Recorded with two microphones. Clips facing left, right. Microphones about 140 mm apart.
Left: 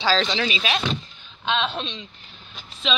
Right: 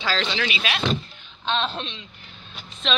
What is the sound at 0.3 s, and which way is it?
Speech, 25° left (ahead or behind).